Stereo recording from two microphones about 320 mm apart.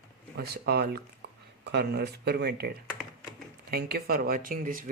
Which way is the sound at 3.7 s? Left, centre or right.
Right.